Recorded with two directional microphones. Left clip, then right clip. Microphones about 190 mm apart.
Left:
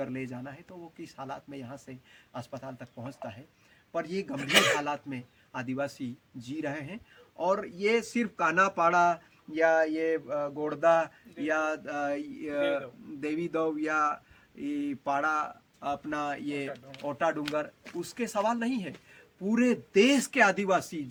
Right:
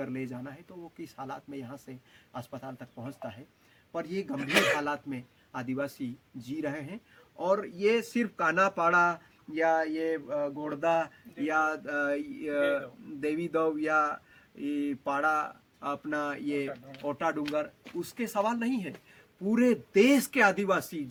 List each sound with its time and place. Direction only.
0.0 s speech: centre (ahead or behind)
4.4 s speech: 60° left (ahead or behind)
4.8 s speech: centre (ahead or behind)